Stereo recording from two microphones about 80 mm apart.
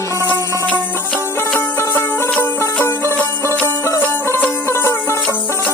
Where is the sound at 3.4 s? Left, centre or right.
Left.